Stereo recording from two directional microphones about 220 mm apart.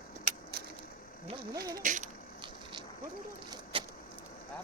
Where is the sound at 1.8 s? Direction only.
35° right (ahead or behind).